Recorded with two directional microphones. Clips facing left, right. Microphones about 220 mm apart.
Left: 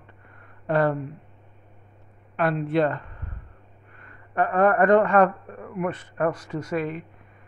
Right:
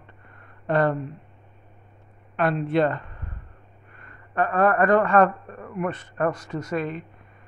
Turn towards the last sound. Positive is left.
turn(degrees=10)  # may be behind; listen again after turning